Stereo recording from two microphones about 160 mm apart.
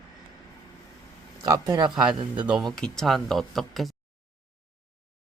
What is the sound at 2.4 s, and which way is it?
Speech, 5° right (ahead or behind).